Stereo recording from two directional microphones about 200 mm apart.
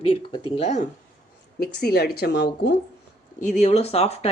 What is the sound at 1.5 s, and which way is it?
Speech, 50° left (ahead or behind).